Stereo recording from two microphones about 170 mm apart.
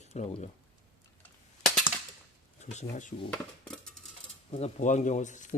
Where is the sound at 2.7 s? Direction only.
45° left (ahead or behind).